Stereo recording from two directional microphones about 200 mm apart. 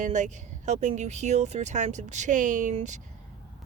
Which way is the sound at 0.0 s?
35° right (ahead or behind).